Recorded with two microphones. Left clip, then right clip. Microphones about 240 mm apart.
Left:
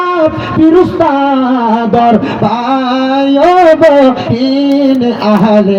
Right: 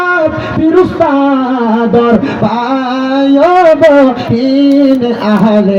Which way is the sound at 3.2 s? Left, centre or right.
Left.